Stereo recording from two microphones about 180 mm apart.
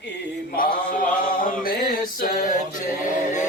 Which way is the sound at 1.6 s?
55° left (ahead or behind).